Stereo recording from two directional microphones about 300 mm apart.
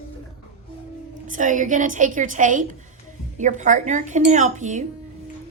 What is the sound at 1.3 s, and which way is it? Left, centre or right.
A woman's voice, right.